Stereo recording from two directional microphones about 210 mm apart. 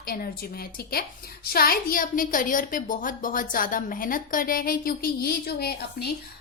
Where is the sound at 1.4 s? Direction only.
45° left (ahead or behind).